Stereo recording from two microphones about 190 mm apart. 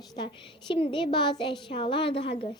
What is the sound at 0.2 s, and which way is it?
A woman's voice, 25° left (ahead or behind).